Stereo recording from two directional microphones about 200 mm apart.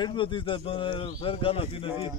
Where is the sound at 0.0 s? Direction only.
25° left (ahead or behind).